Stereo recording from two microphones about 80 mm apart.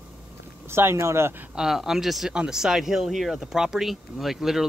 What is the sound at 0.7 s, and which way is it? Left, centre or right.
Speech, right.